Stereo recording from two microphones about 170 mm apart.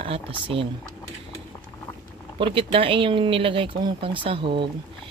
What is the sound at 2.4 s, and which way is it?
Speech, 30° right (ahead or behind).